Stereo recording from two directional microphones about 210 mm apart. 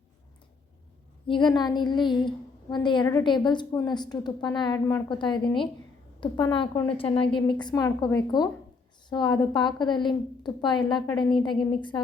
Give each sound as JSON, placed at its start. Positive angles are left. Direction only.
{"t": 1.3, "sound": "a woman's voice", "side_deg": 20}